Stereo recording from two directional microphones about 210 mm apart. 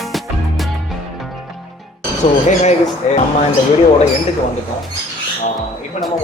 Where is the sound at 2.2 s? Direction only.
30° left (ahead or behind).